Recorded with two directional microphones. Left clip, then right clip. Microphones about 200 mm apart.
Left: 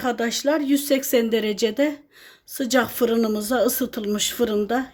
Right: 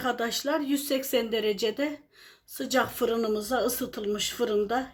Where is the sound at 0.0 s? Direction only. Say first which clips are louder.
Left 6 dB; 25° left (ahead or behind).